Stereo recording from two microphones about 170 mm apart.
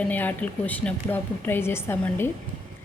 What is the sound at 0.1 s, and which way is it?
A woman's voice, 10° left (ahead or behind).